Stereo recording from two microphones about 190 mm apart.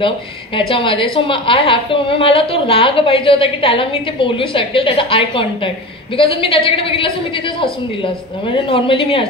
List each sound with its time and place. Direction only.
0.6 s a woman's voice: 25° left (ahead or behind)